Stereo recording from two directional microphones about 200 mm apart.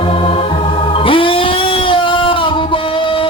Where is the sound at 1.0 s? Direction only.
25° left (ahead or behind).